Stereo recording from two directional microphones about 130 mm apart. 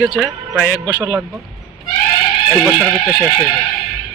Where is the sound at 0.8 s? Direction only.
20° right (ahead or behind).